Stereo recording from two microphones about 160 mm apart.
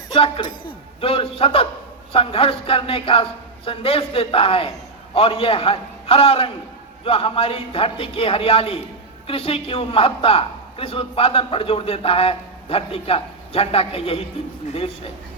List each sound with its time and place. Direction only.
0.1 s a man's voice: 30° left (ahead or behind)